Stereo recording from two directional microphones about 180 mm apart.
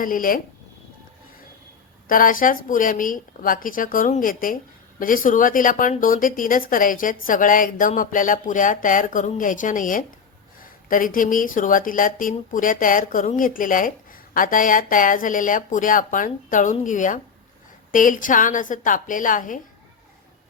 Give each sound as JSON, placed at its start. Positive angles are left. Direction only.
{"t": 0.0, "sound": "speech", "side_deg": 50}
{"t": 2.0, "sound": "speech", "side_deg": 50}